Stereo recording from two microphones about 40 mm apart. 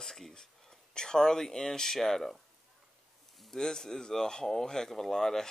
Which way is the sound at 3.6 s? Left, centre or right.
Centre.